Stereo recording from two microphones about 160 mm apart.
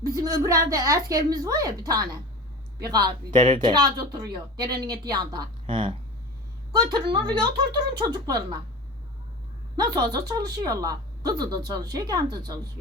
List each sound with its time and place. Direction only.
0.0 s a woman's voice: 20° right (ahead or behind)
9.7 s a woman's voice: 25° right (ahead or behind)